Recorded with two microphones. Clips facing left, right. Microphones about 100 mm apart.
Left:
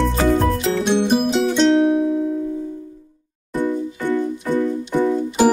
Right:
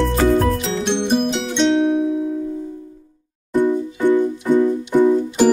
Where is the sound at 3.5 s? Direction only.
15° right (ahead or behind).